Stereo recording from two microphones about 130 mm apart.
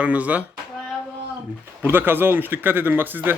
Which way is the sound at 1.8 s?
15° right (ahead or behind).